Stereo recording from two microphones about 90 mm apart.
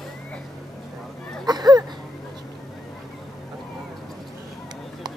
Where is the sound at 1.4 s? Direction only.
50° right (ahead or behind).